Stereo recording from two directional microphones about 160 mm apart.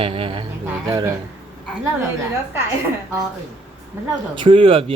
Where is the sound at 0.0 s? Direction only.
35° right (ahead or behind).